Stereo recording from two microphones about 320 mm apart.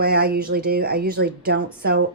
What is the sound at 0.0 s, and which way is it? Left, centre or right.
Speech, right.